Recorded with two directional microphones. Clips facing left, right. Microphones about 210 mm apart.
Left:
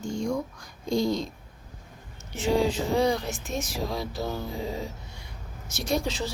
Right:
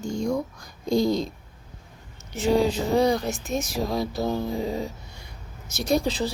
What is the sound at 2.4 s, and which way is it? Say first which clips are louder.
Speech: right 3 dB; 40° right (ahead or behind).